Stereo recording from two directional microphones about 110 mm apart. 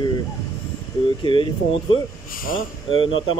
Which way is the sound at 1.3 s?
50° left (ahead or behind).